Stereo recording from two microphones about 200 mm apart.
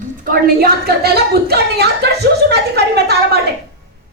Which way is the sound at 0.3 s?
50° right (ahead or behind).